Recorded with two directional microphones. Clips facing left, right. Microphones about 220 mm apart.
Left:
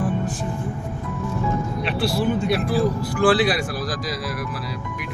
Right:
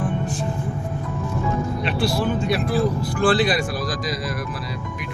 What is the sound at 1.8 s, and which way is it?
Speech, 5° left (ahead or behind).